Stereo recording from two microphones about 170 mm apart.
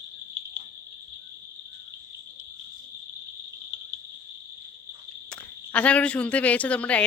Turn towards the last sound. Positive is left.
turn(degrees=5)  # may be behind; listen again after turning